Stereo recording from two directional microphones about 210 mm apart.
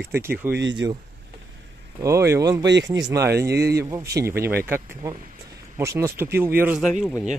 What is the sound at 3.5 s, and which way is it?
Speech, 50° right (ahead or behind).